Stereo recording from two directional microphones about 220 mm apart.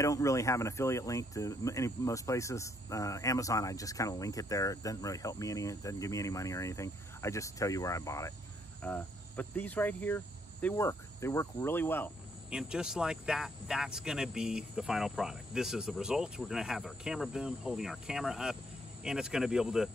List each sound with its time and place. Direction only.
0.0 s speech: 15° left (ahead or behind)
8.8 s cricket: 5° left (ahead or behind)
12.4 s speech: 5° right (ahead or behind)